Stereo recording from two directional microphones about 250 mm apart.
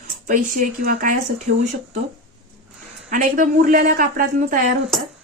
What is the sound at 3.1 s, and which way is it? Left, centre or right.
Speech, right.